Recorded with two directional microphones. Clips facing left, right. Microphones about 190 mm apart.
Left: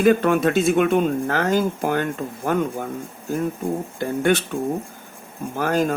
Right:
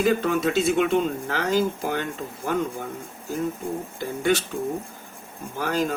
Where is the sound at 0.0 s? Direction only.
60° left (ahead or behind).